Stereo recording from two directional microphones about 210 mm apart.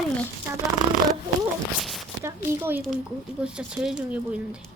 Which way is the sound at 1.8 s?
Centre (ahead or behind).